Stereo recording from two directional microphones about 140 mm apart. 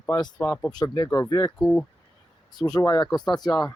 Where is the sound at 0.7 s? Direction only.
30° left (ahead or behind).